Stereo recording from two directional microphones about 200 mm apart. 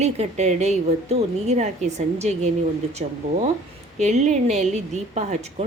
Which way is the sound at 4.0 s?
35° right (ahead or behind).